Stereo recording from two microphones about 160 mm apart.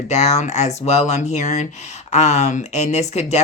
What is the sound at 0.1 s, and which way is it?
Speech, 45° left (ahead or behind).